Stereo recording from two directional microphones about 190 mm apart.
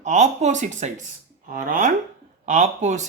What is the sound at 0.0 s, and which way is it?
Speech, 40° right (ahead or behind).